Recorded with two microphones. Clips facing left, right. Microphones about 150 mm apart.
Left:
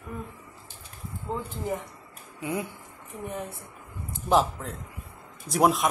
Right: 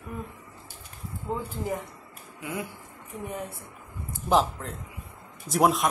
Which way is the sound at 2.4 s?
25° left (ahead or behind).